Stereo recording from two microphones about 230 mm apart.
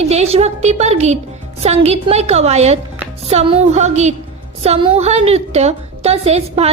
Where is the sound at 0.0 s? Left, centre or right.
Right.